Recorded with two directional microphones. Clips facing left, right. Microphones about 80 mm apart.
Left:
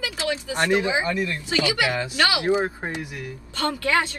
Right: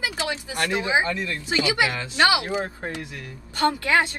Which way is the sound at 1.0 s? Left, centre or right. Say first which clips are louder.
Left 2 dB; left.